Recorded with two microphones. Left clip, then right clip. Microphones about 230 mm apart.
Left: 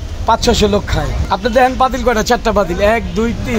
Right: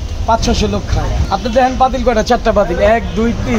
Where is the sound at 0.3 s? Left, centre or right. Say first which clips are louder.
Left 2 dB; left.